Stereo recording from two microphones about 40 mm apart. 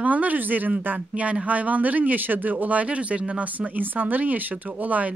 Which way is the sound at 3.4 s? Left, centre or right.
Right.